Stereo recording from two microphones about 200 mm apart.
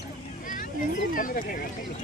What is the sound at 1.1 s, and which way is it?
Speech, 45° left (ahead or behind).